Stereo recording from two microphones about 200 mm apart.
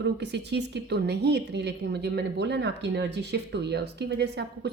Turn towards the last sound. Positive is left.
turn(degrees=-55)  # may be behind; listen again after turning